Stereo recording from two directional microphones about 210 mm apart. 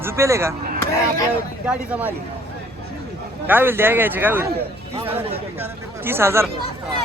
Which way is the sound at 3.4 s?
10° right (ahead or behind).